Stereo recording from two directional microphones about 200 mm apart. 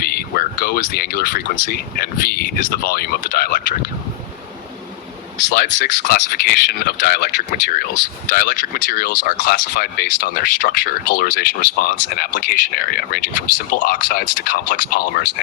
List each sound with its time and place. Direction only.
0.0 s speech: 50° left (ahead or behind)
5.5 s speech: 55° left (ahead or behind)